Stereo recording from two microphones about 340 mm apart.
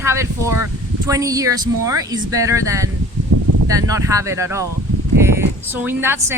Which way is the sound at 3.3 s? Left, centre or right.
Right.